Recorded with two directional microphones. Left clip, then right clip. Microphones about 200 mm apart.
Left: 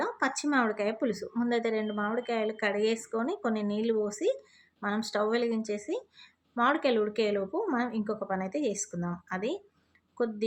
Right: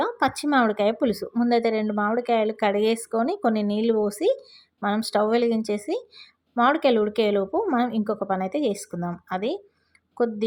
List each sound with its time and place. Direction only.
0.0 s speech: 25° right (ahead or behind)